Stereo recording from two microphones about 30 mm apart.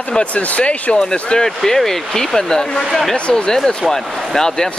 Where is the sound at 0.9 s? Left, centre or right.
Left.